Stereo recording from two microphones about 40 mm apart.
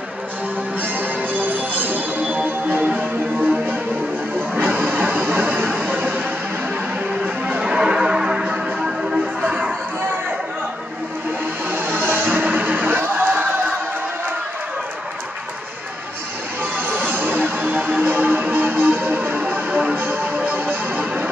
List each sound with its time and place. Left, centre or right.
0.7 s music: right
4.4 s a sound: right
7.2 s music: right
7.6 s music: centre
9.5 s music: right
11.7 s music: right
16.7 s music: right
19.7 s music: right
20.0 s music: right